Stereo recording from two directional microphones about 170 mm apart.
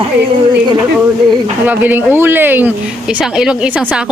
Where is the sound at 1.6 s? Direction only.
10° right (ahead or behind).